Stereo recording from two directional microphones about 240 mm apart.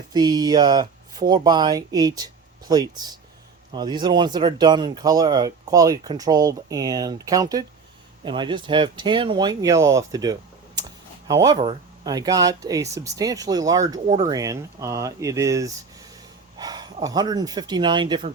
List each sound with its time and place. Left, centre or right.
0.1 s speech: centre